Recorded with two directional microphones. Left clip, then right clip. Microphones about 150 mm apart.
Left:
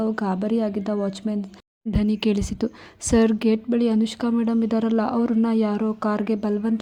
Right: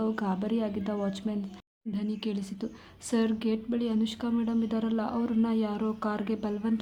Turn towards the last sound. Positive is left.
turn(degrees=40)  # may be behind; listen again after turning